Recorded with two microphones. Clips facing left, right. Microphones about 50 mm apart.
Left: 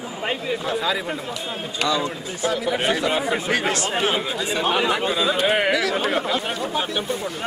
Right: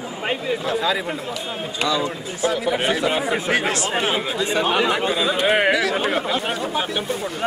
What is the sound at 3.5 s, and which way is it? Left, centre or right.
Speech, centre.